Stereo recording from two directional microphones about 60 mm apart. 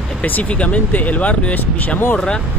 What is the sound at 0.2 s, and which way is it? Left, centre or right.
Speech, left.